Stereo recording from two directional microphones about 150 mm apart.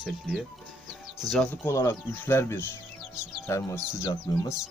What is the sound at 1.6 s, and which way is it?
Speech, 15° left (ahead or behind).